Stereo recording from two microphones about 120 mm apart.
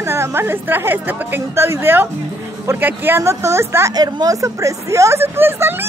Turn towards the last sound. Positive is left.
turn(degrees=-20)  # may be behind; listen again after turning